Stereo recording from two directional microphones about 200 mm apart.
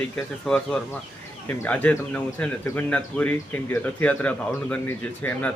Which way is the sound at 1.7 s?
5° left (ahead or behind).